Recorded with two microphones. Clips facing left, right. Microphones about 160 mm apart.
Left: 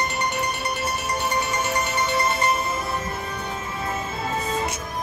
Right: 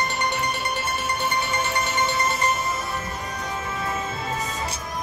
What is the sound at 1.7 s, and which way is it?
Music, 35° left (ahead or behind).